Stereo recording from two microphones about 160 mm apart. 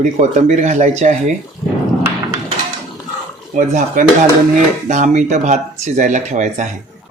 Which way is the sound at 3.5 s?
55° right (ahead or behind).